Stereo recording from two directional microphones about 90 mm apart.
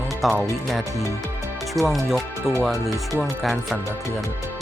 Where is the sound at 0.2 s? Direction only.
Centre (ahead or behind).